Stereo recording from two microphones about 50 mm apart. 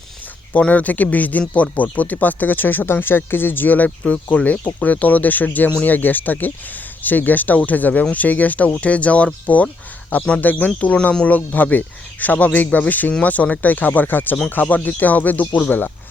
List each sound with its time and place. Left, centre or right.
0.5 s speech: left
3.8 s speech: left